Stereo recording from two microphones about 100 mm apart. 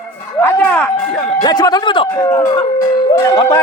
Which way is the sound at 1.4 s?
45° left (ahead or behind).